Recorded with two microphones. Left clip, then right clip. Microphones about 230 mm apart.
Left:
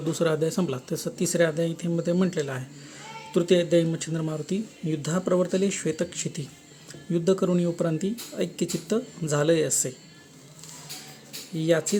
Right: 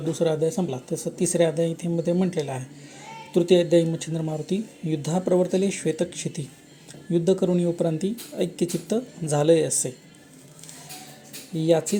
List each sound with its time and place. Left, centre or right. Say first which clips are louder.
0.1 s speech: right 2 dB; centre
11.5 s speech: right 2 dB; centre